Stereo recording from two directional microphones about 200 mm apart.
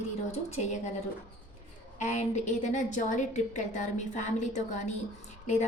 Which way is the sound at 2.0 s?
35° left (ahead or behind).